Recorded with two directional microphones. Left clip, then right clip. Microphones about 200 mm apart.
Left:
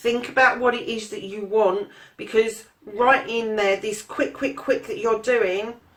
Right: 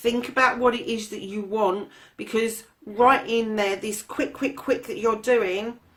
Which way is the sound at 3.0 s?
45° right (ahead or behind).